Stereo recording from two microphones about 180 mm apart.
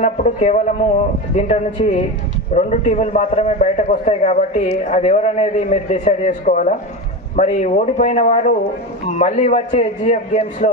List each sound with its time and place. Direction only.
0.0 s a man's voice: 40° left (ahead or behind)